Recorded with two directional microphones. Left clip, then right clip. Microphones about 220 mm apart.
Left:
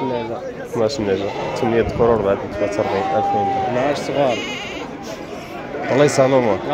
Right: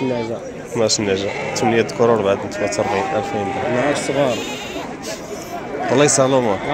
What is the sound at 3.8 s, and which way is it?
Speech, 35° right (ahead or behind).